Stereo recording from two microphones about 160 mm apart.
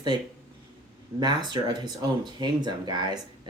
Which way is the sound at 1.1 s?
25° right (ahead or behind).